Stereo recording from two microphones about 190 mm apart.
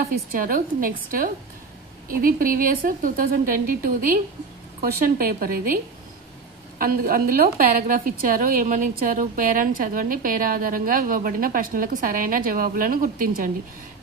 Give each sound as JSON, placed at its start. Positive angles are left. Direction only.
{"t": 0.0, "sound": "a woman's voice", "side_deg": -50}
{"t": 6.8, "sound": "a woman's voice", "side_deg": -50}